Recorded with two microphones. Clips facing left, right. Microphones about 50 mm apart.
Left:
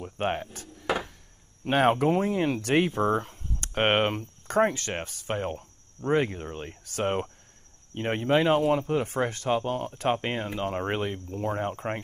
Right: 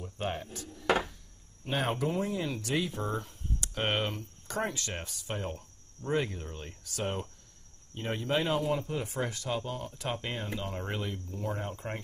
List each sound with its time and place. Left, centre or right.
0.0 s speech: left